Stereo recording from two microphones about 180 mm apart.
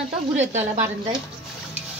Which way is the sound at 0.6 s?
15° right (ahead or behind).